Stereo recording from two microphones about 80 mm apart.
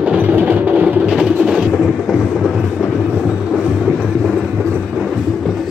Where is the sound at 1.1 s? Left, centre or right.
Centre.